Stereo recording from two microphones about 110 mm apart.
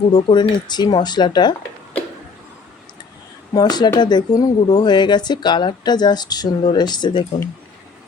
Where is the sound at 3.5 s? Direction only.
40° left (ahead or behind).